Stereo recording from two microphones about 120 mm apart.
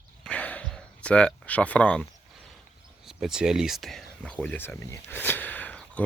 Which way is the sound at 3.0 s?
5° right (ahead or behind).